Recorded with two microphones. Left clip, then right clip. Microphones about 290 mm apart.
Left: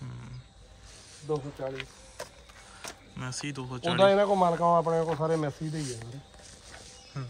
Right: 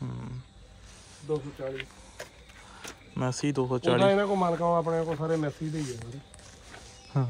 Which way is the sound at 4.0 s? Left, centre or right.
Left.